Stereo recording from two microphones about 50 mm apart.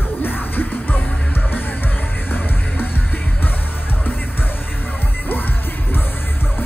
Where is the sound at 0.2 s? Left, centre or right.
Left.